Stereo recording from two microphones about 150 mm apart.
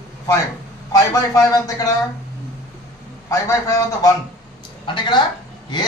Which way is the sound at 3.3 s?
20° left (ahead or behind).